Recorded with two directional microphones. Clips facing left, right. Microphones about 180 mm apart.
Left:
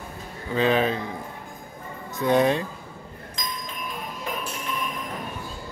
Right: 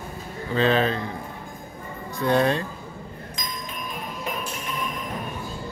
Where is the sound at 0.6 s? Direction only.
10° left (ahead or behind).